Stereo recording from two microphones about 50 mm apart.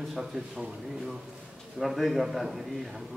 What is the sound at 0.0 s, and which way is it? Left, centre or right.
Speech, centre.